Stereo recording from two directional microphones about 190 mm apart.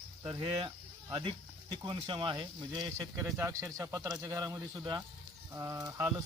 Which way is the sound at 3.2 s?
15° right (ahead or behind).